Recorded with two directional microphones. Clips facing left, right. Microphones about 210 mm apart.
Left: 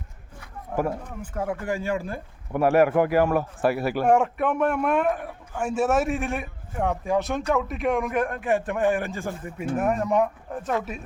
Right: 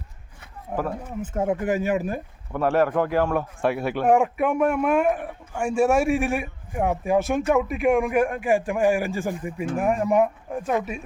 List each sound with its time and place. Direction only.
0.7 s speech: 20° right (ahead or behind)
2.5 s a man's voice: 10° left (ahead or behind); by 10.6 s 10° right (ahead or behind)